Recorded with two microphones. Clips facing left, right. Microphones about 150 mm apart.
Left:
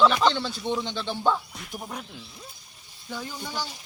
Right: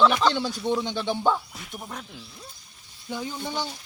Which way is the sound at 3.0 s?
15° right (ahead or behind).